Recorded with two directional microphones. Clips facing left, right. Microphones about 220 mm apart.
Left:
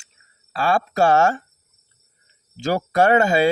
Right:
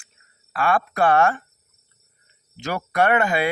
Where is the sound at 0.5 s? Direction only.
25° left (ahead or behind).